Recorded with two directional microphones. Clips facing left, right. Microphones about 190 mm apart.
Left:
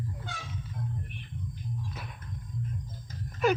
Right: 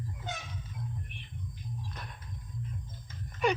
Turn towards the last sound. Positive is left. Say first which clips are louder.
# left 3 dB
turn(degrees=0)  # may be behind; listen again after turning